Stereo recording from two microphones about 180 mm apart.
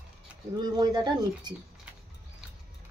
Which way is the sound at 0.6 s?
20° right (ahead or behind).